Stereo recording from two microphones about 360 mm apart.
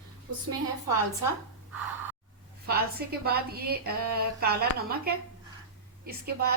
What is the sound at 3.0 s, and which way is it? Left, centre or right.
A woman's voice, right.